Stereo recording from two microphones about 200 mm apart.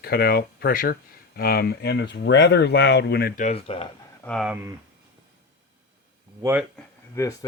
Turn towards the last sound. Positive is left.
turn(degrees=15)  # may be behind; listen again after turning